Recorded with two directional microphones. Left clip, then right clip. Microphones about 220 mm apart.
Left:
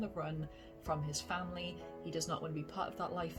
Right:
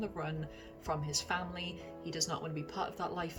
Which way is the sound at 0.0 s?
5° left (ahead or behind).